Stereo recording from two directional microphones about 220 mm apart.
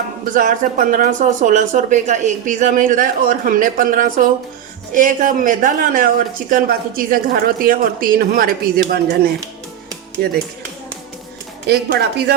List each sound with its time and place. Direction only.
0.3 s speech: 40° right (ahead or behind)
10.2 s speech: 45° right (ahead or behind)
11.7 s speech: 50° right (ahead or behind)